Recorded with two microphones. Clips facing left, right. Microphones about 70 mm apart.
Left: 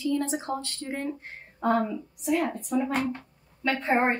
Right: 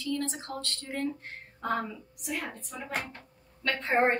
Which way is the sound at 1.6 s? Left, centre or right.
Centre.